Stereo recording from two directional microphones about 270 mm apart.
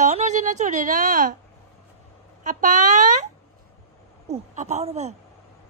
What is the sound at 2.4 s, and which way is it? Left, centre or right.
Speech, right.